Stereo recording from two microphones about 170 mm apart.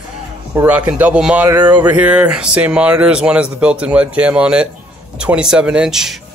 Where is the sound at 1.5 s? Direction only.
25° right (ahead or behind).